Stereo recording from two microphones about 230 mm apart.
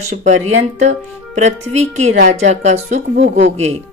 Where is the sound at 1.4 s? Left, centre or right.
Right.